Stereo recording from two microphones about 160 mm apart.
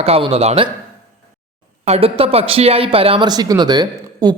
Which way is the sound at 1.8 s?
40° right (ahead or behind).